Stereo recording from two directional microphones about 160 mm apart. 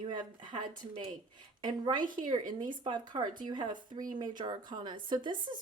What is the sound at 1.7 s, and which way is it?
Speech, 25° right (ahead or behind).